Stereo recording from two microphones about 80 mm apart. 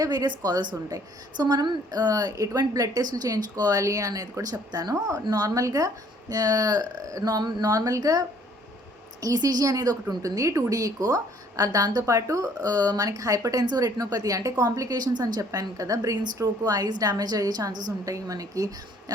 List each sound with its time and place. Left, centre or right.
0.0 s a woman's voice: right
0.3 s a woman's voice: right